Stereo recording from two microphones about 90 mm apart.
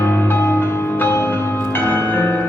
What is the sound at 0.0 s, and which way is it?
Music, 25° left (ahead or behind).